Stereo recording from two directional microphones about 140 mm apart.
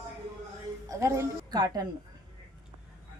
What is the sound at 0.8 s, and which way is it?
A woman's voice, 20° right (ahead or behind).